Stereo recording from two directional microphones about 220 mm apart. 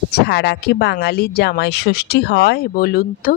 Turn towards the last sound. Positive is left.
turn(degrees=40)  # may be behind; listen again after turning